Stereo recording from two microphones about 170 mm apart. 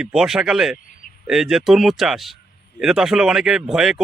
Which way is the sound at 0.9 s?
55° left (ahead or behind).